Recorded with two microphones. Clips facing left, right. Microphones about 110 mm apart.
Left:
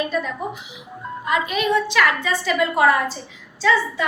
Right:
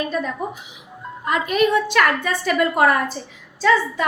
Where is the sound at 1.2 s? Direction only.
45° right (ahead or behind).